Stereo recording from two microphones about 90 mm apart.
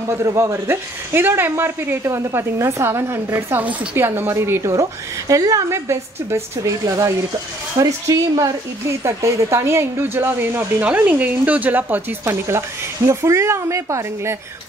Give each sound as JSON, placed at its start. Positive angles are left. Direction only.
{"t": 0.2, "sound": "speech", "side_deg": -30}